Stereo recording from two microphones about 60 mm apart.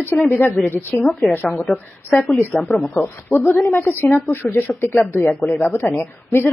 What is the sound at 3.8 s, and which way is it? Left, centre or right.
A woman's voice, left.